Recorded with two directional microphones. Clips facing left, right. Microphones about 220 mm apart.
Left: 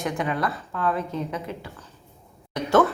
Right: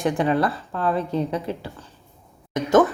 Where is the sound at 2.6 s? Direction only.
15° right (ahead or behind).